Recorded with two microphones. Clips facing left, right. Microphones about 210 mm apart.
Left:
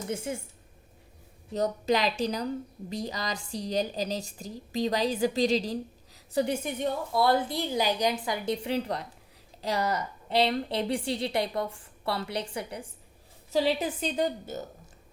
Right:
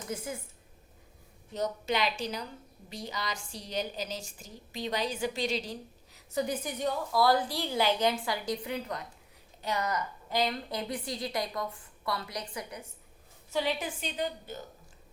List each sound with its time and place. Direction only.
0.1 s a woman's voice: 25° left (ahead or behind)
1.5 s a woman's voice: 40° left (ahead or behind)